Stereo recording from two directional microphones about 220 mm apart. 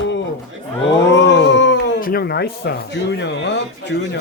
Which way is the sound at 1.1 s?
55° left (ahead or behind).